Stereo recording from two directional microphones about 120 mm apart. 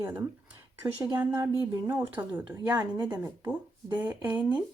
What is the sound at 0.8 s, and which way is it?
Speech, 30° right (ahead or behind).